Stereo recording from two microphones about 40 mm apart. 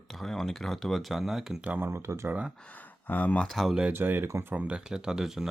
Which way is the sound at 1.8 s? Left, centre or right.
Right.